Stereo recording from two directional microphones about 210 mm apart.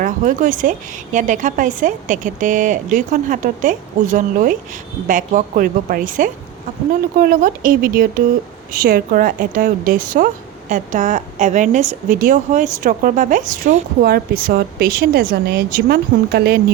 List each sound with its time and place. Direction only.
0.0 s a woman's voice: 40° right (ahead or behind)